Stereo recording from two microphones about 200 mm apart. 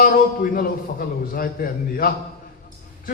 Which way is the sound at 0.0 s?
45° left (ahead or behind).